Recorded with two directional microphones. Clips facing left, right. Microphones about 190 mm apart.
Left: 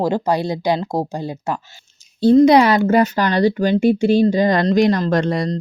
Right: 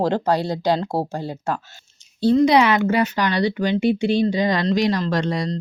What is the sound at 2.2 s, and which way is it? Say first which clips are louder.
Speech: left 5 dB; 45° left (ahead or behind).